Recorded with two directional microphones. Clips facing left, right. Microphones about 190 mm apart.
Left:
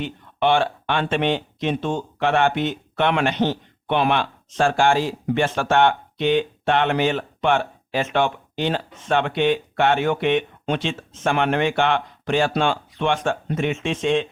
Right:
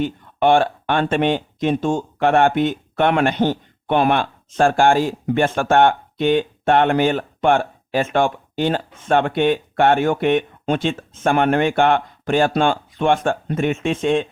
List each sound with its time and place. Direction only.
0.0 s speech: 50° right (ahead or behind)